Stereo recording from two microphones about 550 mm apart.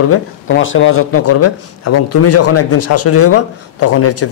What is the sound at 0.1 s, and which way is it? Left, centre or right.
Speech, left.